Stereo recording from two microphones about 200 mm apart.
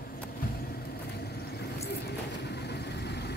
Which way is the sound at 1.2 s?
55° left (ahead or behind).